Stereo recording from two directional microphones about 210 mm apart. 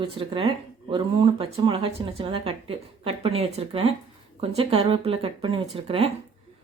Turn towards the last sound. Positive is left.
turn(degrees=-25)  # may be behind; listen again after turning